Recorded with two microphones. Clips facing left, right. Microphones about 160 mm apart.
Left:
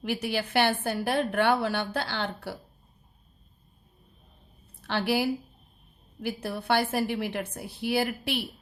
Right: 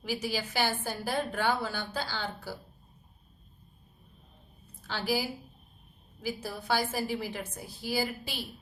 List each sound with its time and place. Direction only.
0.0 s a woman's voice: 60° left (ahead or behind)
4.8 s a woman's voice: 65° left (ahead or behind)